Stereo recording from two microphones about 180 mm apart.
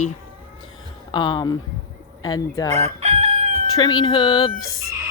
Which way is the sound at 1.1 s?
25° left (ahead or behind).